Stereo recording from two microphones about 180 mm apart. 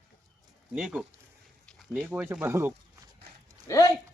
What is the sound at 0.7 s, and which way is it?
Speech, 5° right (ahead or behind).